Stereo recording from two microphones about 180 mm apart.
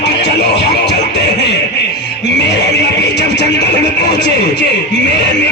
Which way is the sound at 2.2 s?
70° left (ahead or behind).